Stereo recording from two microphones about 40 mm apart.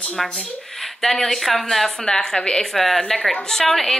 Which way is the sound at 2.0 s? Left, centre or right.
Centre.